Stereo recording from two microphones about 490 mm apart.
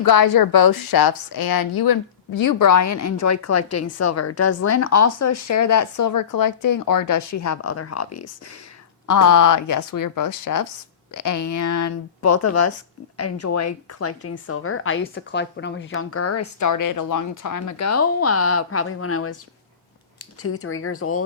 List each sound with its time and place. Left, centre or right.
0.0 s a woman's voice: left
20.4 s a woman's voice: left